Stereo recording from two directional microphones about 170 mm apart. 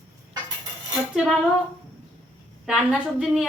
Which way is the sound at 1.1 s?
Centre (ahead or behind).